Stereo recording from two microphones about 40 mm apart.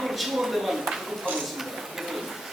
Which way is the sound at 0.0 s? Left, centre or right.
Centre.